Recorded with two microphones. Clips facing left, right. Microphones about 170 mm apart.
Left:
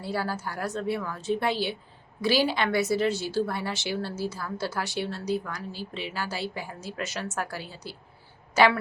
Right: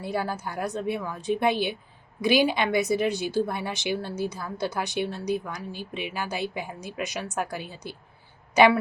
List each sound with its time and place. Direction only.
0.0 s a woman's voice: 20° right (ahead or behind)